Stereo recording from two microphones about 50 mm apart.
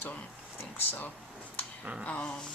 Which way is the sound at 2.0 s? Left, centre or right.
Left.